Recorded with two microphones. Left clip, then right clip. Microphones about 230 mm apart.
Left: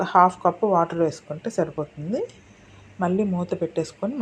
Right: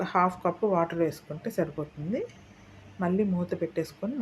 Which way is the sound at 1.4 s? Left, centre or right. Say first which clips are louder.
Left 5 dB; centre.